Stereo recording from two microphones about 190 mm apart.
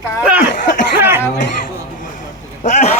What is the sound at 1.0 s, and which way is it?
Speech, 10° right (ahead or behind).